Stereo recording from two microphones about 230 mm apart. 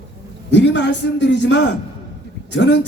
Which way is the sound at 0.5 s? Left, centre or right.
Left.